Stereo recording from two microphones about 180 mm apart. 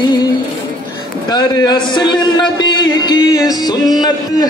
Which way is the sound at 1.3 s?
25° left (ahead or behind).